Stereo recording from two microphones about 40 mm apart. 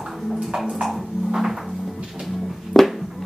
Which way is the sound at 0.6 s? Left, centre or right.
Centre.